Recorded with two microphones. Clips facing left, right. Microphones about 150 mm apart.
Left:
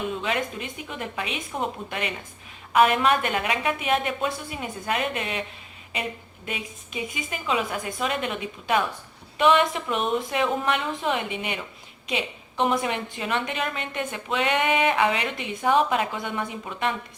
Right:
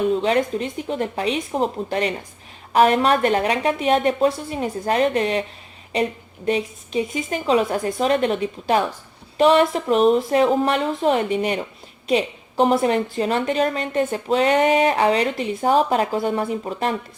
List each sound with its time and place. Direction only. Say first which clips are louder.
0.1 s a woman's voice: right 9 dB; 35° right (ahead or behind)